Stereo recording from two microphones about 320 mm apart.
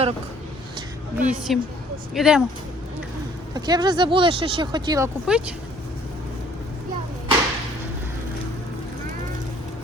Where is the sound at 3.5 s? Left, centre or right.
Centre.